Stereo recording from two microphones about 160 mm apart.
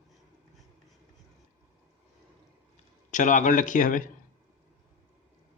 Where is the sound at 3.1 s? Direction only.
50° left (ahead or behind).